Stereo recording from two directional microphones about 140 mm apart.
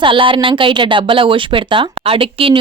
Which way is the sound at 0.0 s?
35° right (ahead or behind).